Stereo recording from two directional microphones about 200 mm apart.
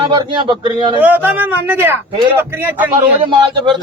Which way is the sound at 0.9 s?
10° right (ahead or behind).